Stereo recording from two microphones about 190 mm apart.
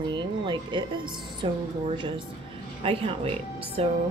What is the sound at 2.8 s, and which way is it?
A woman's voice, 30° right (ahead or behind).